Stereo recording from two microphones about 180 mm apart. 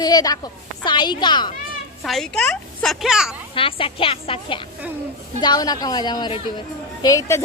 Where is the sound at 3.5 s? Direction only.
30° left (ahead or behind).